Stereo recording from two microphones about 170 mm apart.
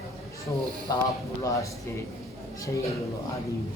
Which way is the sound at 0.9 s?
20° left (ahead or behind).